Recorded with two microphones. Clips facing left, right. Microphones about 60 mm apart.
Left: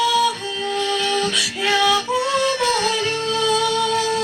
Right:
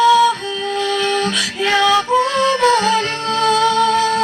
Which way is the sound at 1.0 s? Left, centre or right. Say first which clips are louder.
Right 3 dB; right.